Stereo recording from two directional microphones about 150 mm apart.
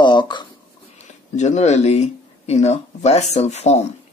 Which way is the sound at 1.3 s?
50° left (ahead or behind).